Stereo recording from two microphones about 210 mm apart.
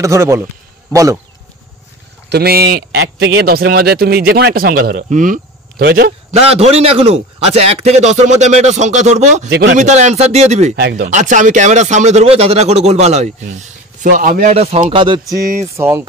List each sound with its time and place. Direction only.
0.0 s a man's voice: 15° right (ahead or behind)
2.2 s a man's voice: 50° right (ahead or behind)
6.3 s a man's voice: 30° right (ahead or behind)
9.5 s a man's voice: 50° right (ahead or behind)
9.8 s a man's voice: 35° right (ahead or behind)
10.8 s a man's voice: 50° right (ahead or behind)
11.1 s a man's voice: 35° right (ahead or behind)
15.7 s a man's voice: 10° right (ahead or behind)